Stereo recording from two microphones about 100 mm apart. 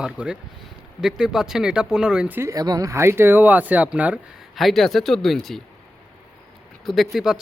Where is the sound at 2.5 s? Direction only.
40° right (ahead or behind); by 4.2 s 10° right (ahead or behind).